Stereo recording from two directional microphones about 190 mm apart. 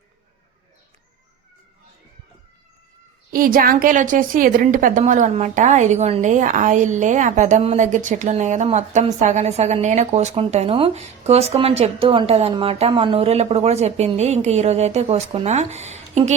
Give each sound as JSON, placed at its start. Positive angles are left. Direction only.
{"t": 3.3, "sound": "a woman's voice", "side_deg": -50}